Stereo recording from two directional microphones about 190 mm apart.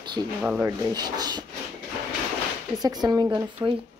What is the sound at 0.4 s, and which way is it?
Speech, 10° right (ahead or behind).